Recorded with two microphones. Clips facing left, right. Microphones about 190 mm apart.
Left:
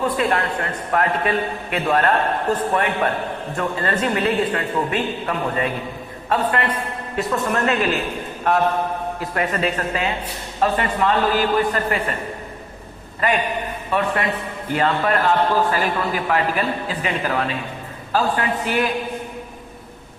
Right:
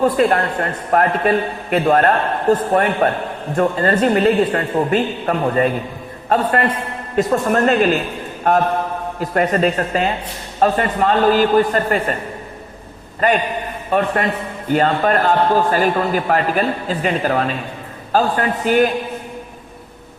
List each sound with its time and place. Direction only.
0.0 s a man's voice: 40° right (ahead or behind)
9.3 s a man's voice: 40° right (ahead or behind)
13.9 s a man's voice: 40° right (ahead or behind)